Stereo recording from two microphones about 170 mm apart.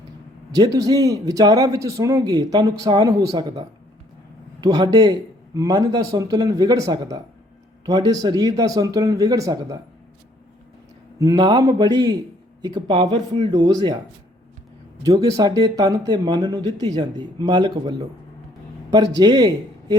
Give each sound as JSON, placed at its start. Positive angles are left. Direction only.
{"t": 0.5, "sound": "a man's voice", "side_deg": -20}
{"t": 11.2, "sound": "a man's voice", "side_deg": -20}
{"t": 15.0, "sound": "a man's voice", "side_deg": -20}